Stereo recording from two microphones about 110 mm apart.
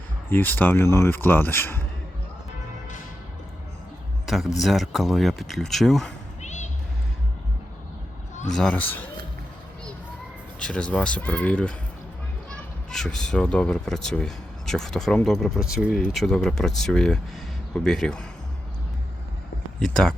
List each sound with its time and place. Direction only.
0.3 s speech: 20° left (ahead or behind)
4.3 s a man's voice: centre (ahead or behind)
6.4 s a sound: 90° left
8.4 s speech: 5° left (ahead or behind)
10.6 s speech: 10° left (ahead or behind)
12.9 s speech: 5° left (ahead or behind)
19.8 s speech: 5° left (ahead or behind)